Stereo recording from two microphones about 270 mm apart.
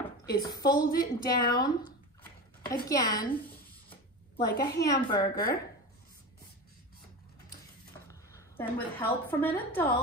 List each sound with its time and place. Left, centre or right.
0.4 s a woman's voice: centre
0.8 s a woman's voice: left
2.6 s a woman's voice: centre
3.9 s a sound: centre
4.8 s a woman's voice: centre
5.2 s a woman's voice: left
8.1 s a woman's voice: centre